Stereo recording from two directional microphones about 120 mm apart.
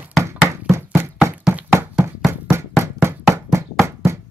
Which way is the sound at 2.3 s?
20° right (ahead or behind).